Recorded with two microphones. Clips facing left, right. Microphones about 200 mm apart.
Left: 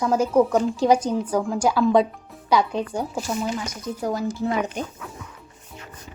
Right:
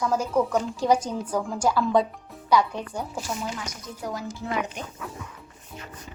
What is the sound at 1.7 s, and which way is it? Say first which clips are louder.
Speech: left 4 dB; 15° left (ahead or behind).